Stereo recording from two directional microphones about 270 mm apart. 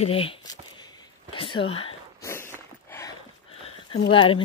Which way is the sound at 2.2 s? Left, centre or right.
Centre.